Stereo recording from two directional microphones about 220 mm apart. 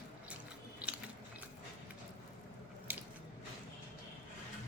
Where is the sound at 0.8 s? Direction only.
5° right (ahead or behind).